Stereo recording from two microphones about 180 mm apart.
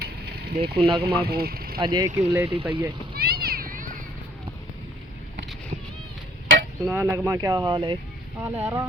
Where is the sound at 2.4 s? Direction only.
30° right (ahead or behind).